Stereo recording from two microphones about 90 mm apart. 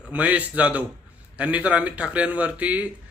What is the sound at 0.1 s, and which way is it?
Speech, 15° right (ahead or behind).